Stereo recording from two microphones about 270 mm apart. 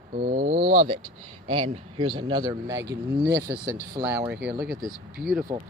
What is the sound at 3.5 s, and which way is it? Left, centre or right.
Speech, centre.